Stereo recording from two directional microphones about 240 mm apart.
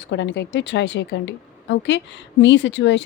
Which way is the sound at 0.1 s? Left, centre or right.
Left.